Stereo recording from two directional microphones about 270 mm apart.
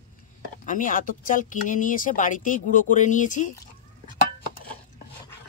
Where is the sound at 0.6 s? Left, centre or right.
Left.